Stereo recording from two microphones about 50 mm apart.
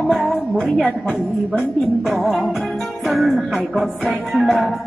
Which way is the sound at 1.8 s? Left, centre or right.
Centre.